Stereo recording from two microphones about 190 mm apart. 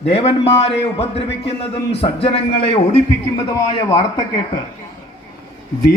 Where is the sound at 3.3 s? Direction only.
20° left (ahead or behind).